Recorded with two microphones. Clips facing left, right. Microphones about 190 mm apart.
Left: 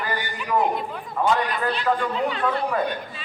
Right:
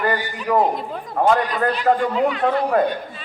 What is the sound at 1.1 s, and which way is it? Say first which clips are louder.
Speech: right 4 dB; 60° right (ahead or behind).